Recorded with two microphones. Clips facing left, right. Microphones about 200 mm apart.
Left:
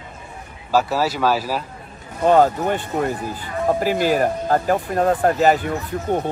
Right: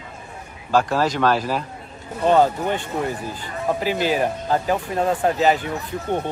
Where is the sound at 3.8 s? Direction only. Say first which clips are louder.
Left 2 dB; 45° left (ahead or behind).